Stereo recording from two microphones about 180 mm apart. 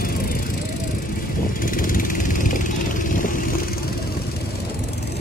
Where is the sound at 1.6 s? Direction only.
50° left (ahead or behind).